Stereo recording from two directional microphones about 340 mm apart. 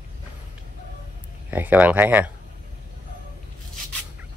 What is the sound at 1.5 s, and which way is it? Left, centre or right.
Speech, centre.